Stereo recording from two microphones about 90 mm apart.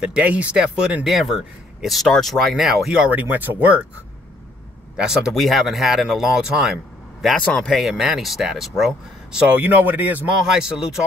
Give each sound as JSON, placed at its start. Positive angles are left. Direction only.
{"t": 0.0, "sound": "speech", "side_deg": -15}
{"t": 4.9, "sound": "speech", "side_deg": -5}
{"t": 7.3, "sound": "speech", "side_deg": 10}
{"t": 7.7, "sound": "speech", "side_deg": -5}
{"t": 9.4, "sound": "speech", "side_deg": -15}
{"t": 10.5, "sound": "speech", "side_deg": -5}